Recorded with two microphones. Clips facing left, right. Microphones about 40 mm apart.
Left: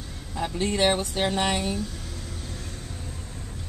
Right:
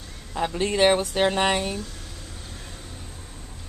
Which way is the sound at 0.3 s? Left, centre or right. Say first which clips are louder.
Right 2 dB; right.